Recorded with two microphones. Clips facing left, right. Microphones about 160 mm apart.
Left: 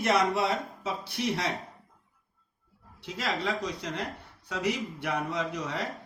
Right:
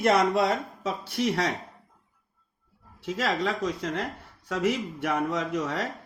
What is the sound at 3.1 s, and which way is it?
A man's voice, 45° right (ahead or behind).